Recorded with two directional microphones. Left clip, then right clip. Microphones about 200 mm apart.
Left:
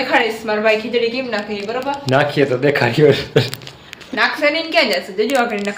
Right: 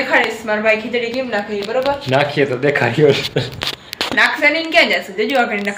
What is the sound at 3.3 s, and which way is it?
Speech, 55° left (ahead or behind).